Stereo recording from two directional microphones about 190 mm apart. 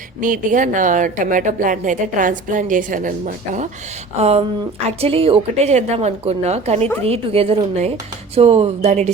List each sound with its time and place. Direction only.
0.2 s a woman's voice: 45° right (ahead or behind)